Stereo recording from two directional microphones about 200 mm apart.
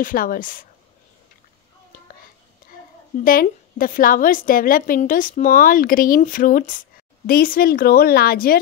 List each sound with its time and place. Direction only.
0.0 s a woman's voice: 45° left (ahead or behind)
3.3 s a woman's voice: 45° left (ahead or behind)